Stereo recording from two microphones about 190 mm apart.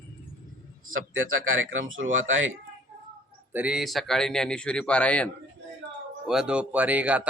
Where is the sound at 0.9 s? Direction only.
90° right.